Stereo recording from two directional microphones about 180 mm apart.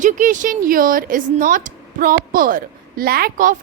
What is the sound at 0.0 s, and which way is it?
A woman's voice, 45° right (ahead or behind).